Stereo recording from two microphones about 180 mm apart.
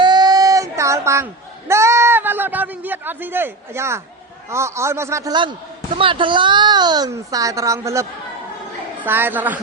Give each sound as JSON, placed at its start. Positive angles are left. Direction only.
{"t": 0.0, "sound": "a sound", "side_deg": -25}
{"t": 4.4, "sound": "a man's voice", "side_deg": -15}
{"t": 9.0, "sound": "a woman's voice", "side_deg": -10}